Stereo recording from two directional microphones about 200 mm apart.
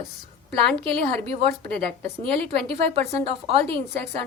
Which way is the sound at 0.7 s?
30° right (ahead or behind).